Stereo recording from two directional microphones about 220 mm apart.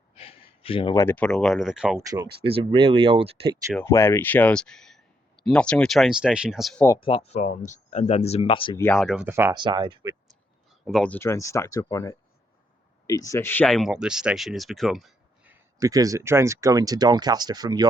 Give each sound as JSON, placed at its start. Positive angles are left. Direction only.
{"t": 0.1, "sound": "a sound", "side_deg": 25}
{"t": 1.0, "sound": "speech", "side_deg": 5}
{"t": 2.0, "sound": "speech", "side_deg": -15}
{"t": 3.8, "sound": "speech", "side_deg": 10}
{"t": 6.8, "sound": "speech", "side_deg": 20}
{"t": 8.8, "sound": "speech", "side_deg": 5}
{"t": 10.8, "sound": "speech", "side_deg": 5}
{"t": 15.8, "sound": "speech", "side_deg": -15}